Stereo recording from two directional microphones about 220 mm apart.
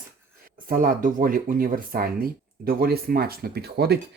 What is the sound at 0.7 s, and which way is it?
Speech, 40° right (ahead or behind).